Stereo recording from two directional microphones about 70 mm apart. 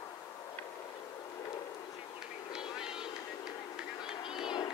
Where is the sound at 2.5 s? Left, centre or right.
Centre.